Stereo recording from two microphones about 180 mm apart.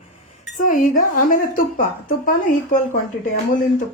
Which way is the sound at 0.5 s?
45° left (ahead or behind).